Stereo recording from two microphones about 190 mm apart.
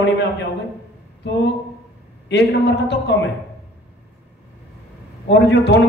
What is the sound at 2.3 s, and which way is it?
Speech, 60° left (ahead or behind).